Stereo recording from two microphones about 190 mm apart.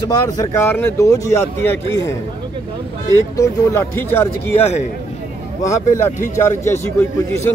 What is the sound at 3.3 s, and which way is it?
Speech, 15° left (ahead or behind).